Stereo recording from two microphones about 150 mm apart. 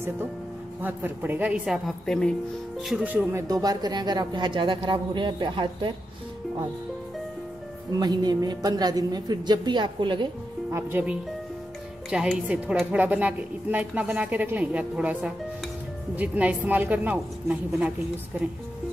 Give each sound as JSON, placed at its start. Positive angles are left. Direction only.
{"t": 0.8, "sound": "a woman's voice", "side_deg": -10}
{"t": 7.9, "sound": "a woman's voice", "side_deg": -25}
{"t": 10.7, "sound": "a woman's voice", "side_deg": -15}